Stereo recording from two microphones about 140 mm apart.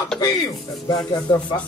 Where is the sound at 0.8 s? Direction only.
25° left (ahead or behind).